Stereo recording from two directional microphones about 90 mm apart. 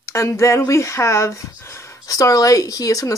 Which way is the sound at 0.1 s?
35° left (ahead or behind).